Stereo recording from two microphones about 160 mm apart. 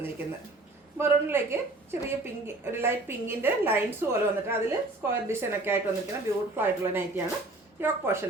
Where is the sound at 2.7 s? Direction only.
15° right (ahead or behind).